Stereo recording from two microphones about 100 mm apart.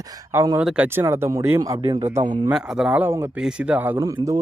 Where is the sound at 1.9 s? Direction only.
50° right (ahead or behind).